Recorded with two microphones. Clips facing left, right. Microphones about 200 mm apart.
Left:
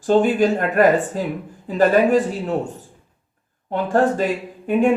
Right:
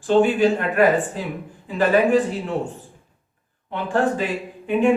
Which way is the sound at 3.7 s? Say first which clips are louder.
Left 3 dB; 45° left (ahead or behind).